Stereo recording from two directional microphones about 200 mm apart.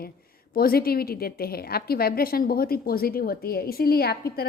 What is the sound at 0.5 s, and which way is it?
A woman's voice, 50° left (ahead or behind).